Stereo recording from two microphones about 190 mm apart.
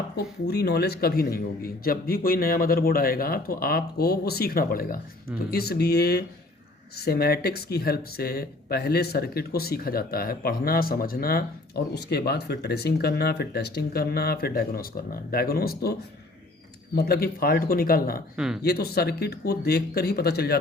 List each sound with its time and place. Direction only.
0.2 s a man's voice: 60° left (ahead or behind)
18.3 s speech: centre (ahead or behind)
18.6 s speech: 55° left (ahead or behind)